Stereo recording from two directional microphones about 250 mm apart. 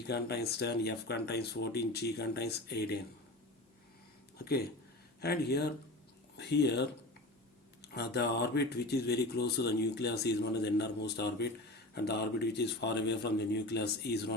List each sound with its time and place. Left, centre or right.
0.1 s speech: left
5.2 s speech: left